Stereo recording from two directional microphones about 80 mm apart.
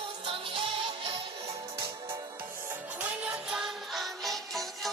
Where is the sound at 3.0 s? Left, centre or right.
Centre.